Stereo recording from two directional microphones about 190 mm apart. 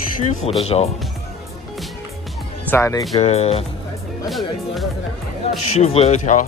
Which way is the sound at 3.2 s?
35° left (ahead or behind).